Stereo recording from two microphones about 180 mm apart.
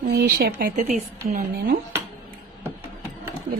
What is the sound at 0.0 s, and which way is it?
Speech, 55° right (ahead or behind).